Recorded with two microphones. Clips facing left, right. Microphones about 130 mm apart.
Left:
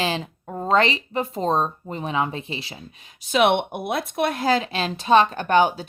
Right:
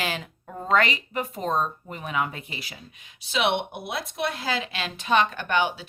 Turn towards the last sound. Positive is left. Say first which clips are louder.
# left 7 dB
turn(degrees=40)  # may be behind; listen again after turning